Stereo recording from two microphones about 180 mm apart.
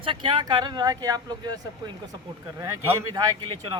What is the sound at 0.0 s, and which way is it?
Speech, 25° right (ahead or behind).